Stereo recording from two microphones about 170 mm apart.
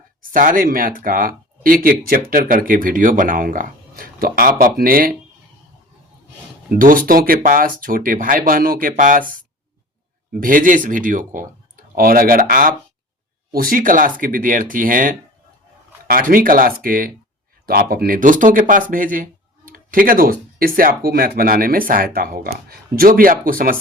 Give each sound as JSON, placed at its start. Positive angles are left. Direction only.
{"t": 0.2, "sound": "speech", "side_deg": -55}
{"t": 6.7, "sound": "speech", "side_deg": -55}
{"t": 10.4, "sound": "speech", "side_deg": -55}